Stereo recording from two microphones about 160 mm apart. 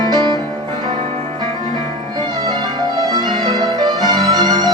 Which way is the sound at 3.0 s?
25° right (ahead or behind).